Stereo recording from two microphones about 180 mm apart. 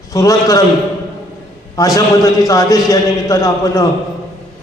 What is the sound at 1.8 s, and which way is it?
A man's voice, 20° left (ahead or behind).